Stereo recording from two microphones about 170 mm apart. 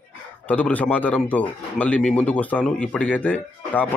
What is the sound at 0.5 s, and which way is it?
A man's voice, 10° left (ahead or behind).